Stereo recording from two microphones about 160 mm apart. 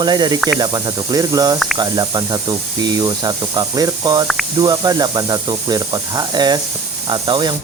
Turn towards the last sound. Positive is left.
turn(degrees=-25)  # may be behind; listen again after turning